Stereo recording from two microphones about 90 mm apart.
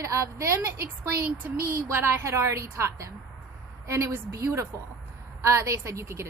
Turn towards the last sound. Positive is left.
turn(degrees=-30)  # may be behind; listen again after turning